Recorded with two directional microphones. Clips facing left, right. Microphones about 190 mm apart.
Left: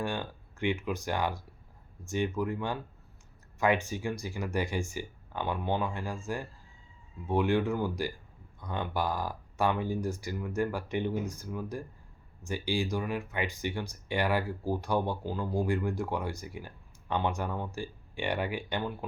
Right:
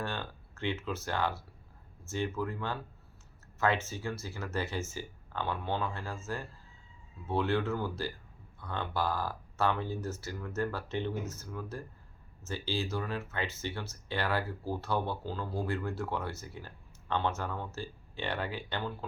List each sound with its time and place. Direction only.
0.0 s speech: 15° left (ahead or behind)